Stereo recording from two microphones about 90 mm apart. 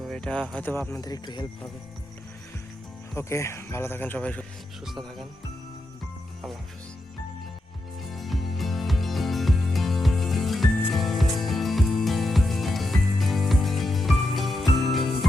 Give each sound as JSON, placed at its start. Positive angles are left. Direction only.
{"t": 0.1, "sound": "music", "side_deg": 10}
{"t": 0.5, "sound": "speech", "side_deg": 25}
{"t": 0.9, "sound": "speech", "side_deg": 45}
{"t": 3.2, "sound": "speech", "side_deg": 30}
{"t": 4.9, "sound": "speech", "side_deg": 0}
{"t": 8.1, "sound": "music", "side_deg": 0}